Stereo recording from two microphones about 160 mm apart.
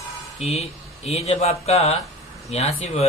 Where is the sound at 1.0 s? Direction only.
40° left (ahead or behind).